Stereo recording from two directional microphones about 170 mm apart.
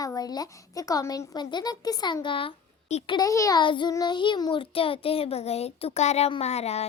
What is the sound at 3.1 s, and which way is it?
Child singing, 20° left (ahead or behind).